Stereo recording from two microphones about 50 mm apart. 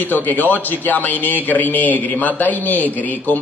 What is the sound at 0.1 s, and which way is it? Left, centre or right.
Speech, left.